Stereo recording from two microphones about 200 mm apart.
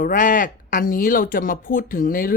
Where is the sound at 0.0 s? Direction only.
40° left (ahead or behind).